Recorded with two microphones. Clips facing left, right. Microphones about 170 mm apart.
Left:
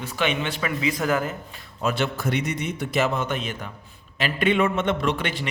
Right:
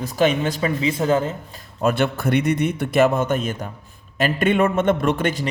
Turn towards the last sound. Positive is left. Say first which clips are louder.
# right 5 dB
turn(degrees=-45)  # may be behind; listen again after turning